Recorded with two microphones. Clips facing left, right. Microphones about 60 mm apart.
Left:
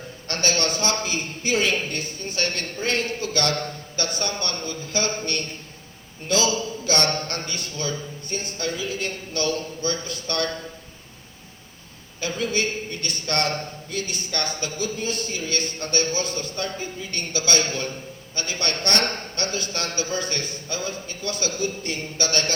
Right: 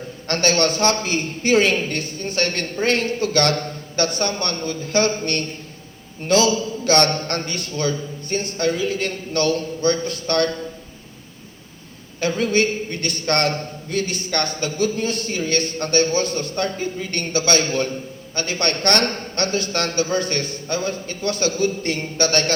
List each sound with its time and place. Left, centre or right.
0.3 s a man's voice: right
6.8 s a sound: right
7.3 s a man's voice: right
12.2 s a man's voice: right